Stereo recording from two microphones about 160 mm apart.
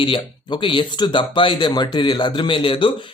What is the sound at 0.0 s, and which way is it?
Speech, 30° left (ahead or behind).